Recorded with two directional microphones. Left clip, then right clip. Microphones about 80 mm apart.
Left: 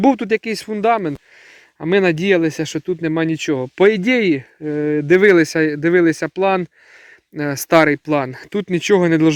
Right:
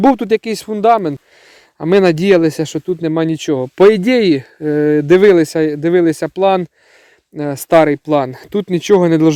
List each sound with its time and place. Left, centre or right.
0.0 s speech: right
1.9 s speech: right
2.6 s speech: right
3.8 s speech: right
4.0 s speech: right
4.4 s speech: right
5.2 s speech: centre
7.3 s speech: centre; by 9.3 s right